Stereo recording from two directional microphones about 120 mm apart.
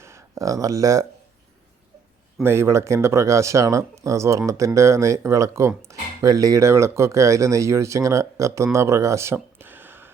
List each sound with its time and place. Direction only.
0.0 s speech: 25° right (ahead or behind)
2.4 s speech: 20° right (ahead or behind)